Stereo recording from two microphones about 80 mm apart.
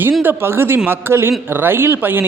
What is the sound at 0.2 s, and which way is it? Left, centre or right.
Speech, right.